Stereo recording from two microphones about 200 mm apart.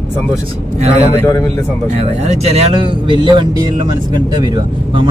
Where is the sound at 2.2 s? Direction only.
30° right (ahead or behind).